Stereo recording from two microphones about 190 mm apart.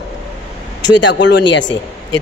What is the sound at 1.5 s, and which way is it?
Speech, 75° left (ahead or behind).